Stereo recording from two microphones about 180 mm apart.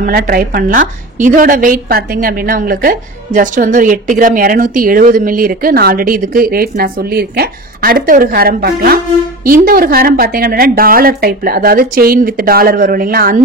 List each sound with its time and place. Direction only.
0.0 s a woman's voice: 55° right (ahead or behind)